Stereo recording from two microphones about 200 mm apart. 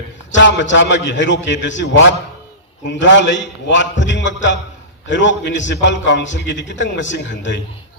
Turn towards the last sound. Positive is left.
turn(degrees=65)  # may be behind; listen again after turning